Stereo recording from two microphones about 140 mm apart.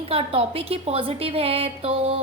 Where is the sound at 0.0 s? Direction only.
45° right (ahead or behind).